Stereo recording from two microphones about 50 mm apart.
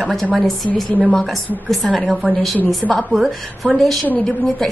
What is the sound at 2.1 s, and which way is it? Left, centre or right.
Speech, right.